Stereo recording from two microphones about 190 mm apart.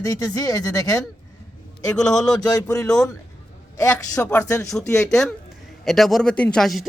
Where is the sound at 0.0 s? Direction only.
20° left (ahead or behind).